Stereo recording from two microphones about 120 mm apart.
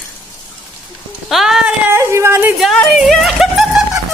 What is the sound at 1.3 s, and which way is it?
Speech, centre (ahead or behind).